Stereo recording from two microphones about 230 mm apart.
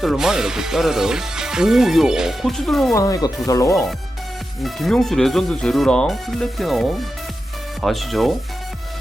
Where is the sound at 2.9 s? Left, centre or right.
Centre.